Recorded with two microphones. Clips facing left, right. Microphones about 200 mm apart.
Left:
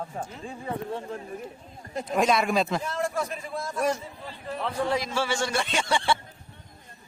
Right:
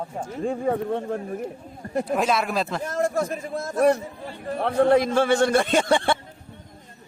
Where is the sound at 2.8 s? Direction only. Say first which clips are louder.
Right 5 dB; 45° right (ahead or behind).